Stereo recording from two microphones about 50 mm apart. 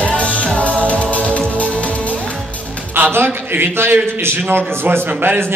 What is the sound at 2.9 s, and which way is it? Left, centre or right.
A man's voice, right.